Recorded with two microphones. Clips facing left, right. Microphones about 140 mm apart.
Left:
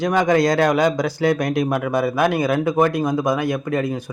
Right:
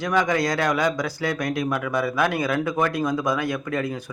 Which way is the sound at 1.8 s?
40° left (ahead or behind).